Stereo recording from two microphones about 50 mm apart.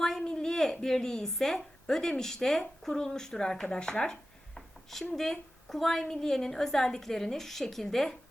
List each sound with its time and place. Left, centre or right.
0.0 s a woman's voice: centre